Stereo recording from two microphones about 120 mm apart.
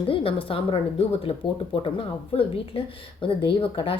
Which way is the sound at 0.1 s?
45° left (ahead or behind).